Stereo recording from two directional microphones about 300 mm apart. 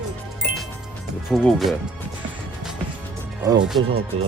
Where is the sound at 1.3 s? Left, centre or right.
Centre.